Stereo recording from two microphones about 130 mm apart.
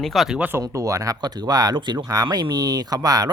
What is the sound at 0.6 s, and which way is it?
Speech, 25° right (ahead or behind).